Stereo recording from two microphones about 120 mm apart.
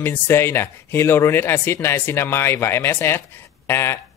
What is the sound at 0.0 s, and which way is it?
Speech, 20° left (ahead or behind).